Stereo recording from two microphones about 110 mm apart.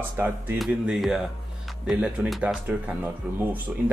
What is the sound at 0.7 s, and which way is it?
Speech, 5° right (ahead or behind).